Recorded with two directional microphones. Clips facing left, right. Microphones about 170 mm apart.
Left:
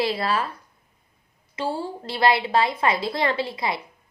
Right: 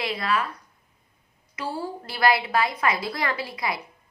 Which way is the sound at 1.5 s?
25° left (ahead or behind).